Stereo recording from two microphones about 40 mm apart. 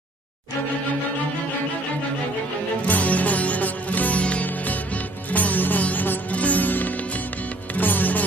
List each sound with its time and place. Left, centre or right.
2.9 s music: left